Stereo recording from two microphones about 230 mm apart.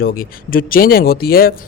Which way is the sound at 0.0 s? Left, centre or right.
Left.